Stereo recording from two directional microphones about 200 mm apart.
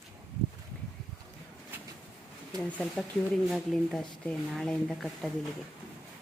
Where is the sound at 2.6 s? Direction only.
5° left (ahead or behind).